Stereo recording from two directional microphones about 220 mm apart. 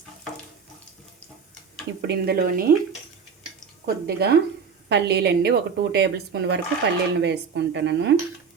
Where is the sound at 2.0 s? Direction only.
50° right (ahead or behind).